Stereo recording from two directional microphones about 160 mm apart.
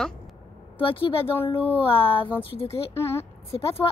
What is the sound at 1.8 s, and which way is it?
Speech, 35° left (ahead or behind).